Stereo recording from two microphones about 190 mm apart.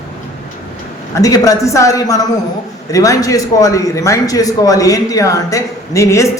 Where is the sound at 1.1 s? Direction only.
20° left (ahead or behind).